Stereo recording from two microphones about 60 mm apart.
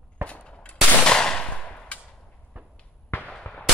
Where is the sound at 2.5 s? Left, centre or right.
Right.